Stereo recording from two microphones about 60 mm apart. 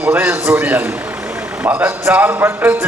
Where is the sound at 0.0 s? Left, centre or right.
Right.